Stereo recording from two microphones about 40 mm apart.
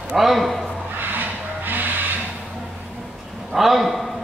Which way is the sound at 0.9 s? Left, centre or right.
Right.